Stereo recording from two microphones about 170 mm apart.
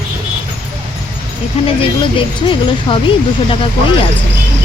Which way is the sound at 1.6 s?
30° left (ahead or behind).